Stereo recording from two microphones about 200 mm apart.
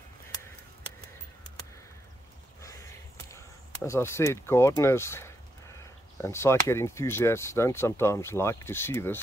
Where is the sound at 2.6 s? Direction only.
15° left (ahead or behind).